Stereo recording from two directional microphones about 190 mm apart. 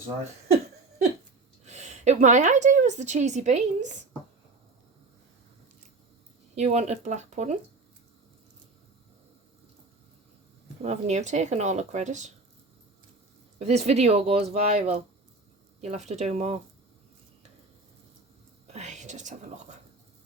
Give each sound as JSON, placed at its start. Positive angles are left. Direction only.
{"t": 1.6, "sound": "a woman's voice", "side_deg": -35}
{"t": 6.6, "sound": "a woman's voice", "side_deg": -35}
{"t": 10.8, "sound": "a woman's voice", "side_deg": -35}
{"t": 13.6, "sound": "a woman's voice", "side_deg": -35}
{"t": 18.7, "sound": "whispering", "side_deg": -40}